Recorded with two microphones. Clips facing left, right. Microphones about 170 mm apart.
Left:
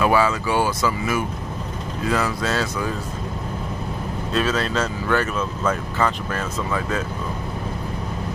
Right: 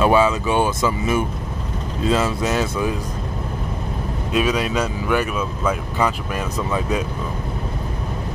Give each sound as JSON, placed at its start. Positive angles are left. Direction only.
{"t": 0.0, "sound": "speech", "side_deg": -20}
{"t": 4.3, "sound": "speech", "side_deg": -15}